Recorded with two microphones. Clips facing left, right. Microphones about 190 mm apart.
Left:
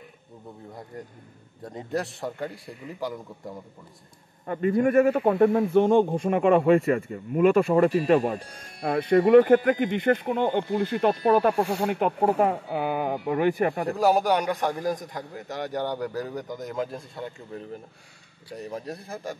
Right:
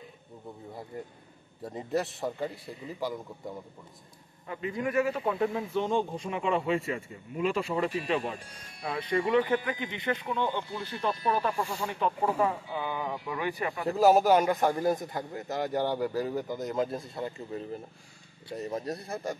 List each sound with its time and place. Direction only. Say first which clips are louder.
1.6 s a man's voice: left 1 dB; 5° right (ahead or behind)
4.5 s speech: left 10 dB; 50° left (ahead or behind)
13.9 s a man's voice: right 2 dB; centre (ahead or behind)
18.6 s a man's voice: right 1 dB; centre (ahead or behind)